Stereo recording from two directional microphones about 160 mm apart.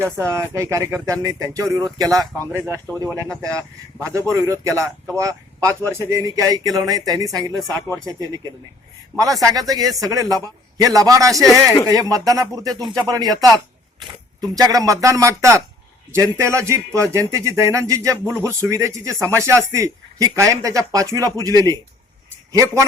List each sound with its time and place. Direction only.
0.0 s a man's voice: 15° right (ahead or behind)
9.4 s a man's voice: 20° right (ahead or behind)
11.4 s speech: centre (ahead or behind)
11.9 s a man's voice: 25° right (ahead or behind)
14.5 s a man's voice: 20° right (ahead or behind)